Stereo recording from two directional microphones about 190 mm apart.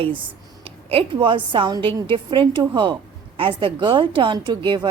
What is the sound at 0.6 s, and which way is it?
A woman's voice, 30° right (ahead or behind).